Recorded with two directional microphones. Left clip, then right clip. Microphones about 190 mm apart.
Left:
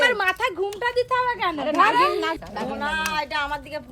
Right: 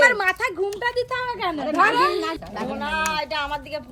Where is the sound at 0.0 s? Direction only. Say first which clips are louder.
Right 3 dB; 30° left (ahead or behind).